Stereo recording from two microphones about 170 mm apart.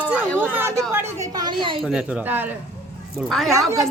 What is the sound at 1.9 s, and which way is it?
Speech, 10° right (ahead or behind).